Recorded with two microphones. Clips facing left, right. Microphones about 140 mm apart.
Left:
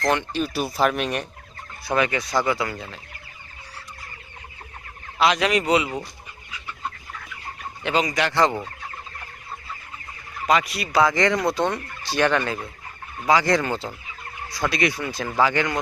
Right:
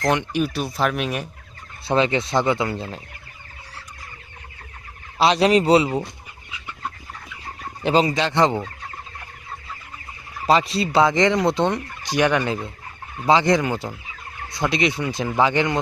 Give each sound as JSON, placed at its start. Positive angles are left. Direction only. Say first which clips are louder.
{"t": 0.0, "sound": "speech", "louder": "right 2 dB", "side_deg": -15}
{"t": 0.5, "sound": "speech", "louder": "left 1 dB", "side_deg": 0}
{"t": 1.8, "sound": "fowl", "louder": "right 3 dB", "side_deg": -25}
{"t": 5.1, "sound": "fowl", "louder": "right 4 dB", "side_deg": -30}
{"t": 7.8, "sound": "fowl", "louder": "right 4 dB", "side_deg": -35}
{"t": 10.4, "sound": "fowl", "louder": "right 3 dB", "side_deg": -30}
{"t": 13.2, "sound": "speech", "louder": "right 2 dB", "side_deg": -20}
{"t": 14.5, "sound": "fowl", "louder": "right 2 dB", "side_deg": -20}